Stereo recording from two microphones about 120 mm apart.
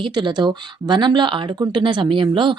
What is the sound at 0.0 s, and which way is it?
Speech, 40° right (ahead or behind).